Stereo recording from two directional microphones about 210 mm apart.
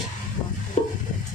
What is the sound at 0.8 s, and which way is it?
Stir, 30° left (ahead or behind).